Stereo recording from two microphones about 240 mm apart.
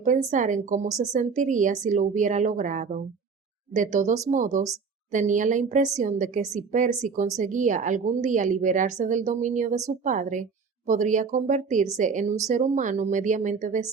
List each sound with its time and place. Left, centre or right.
0.3 s a woman's voice: right